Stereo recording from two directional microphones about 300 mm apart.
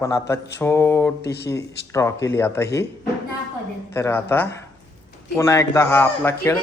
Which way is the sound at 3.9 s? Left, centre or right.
Centre.